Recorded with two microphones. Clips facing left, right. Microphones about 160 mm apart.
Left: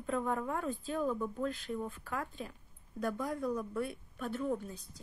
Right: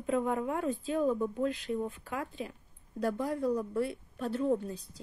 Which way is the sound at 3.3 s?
30° right (ahead or behind).